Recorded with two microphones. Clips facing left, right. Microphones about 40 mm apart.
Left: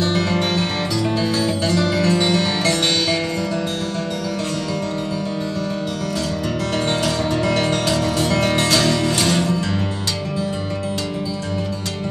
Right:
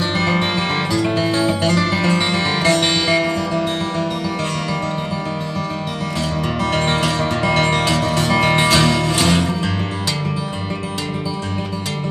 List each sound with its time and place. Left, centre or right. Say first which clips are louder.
0.0 s music: right 1 dB; right
6.6 s music: right 3 dB; right